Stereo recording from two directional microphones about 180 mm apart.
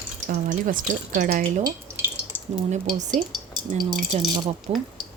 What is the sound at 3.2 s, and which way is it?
Speech, 40° right (ahead or behind).